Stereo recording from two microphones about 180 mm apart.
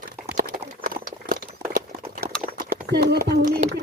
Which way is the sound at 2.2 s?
55° right (ahead or behind).